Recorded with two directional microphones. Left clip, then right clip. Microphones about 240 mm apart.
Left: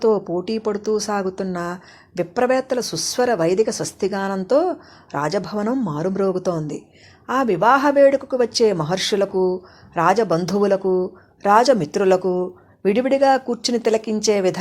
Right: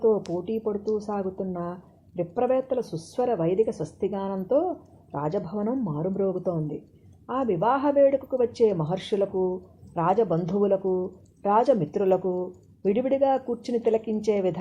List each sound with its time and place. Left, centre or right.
0.0 s speech: left
0.7 s a woman's voice: left
9.3 s speech: left
9.9 s a woman's voice: left
10.8 s a woman's voice: left